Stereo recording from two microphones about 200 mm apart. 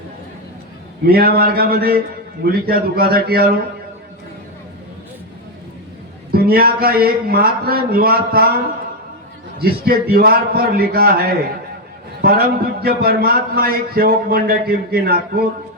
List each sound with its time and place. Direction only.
1.0 s a man's voice: 50° right (ahead or behind)
6.3 s a man's voice: 50° right (ahead or behind)
9.6 s a man's voice: 50° right (ahead or behind)
12.8 s a man's voice: 50° right (ahead or behind)